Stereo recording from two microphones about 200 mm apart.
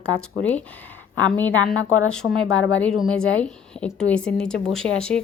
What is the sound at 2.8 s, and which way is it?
A woman's voice, centre (ahead or behind).